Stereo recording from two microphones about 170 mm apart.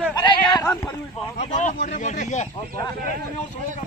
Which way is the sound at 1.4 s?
45° left (ahead or behind).